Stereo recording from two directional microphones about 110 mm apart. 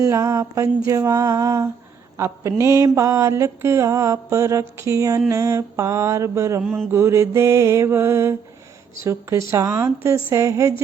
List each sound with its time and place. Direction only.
0.0 s mantra: 25° right (ahead or behind)